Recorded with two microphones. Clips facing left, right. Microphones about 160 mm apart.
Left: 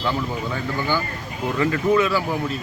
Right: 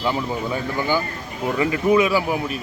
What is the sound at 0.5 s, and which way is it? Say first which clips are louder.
Speech: right 2 dB; 15° right (ahead or behind).